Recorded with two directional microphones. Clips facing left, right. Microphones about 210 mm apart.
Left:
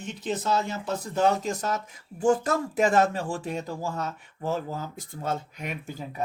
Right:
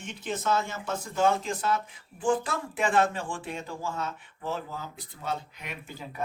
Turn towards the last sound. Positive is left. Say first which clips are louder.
# left 6 dB
turn(degrees=45)  # may be behind; listen again after turning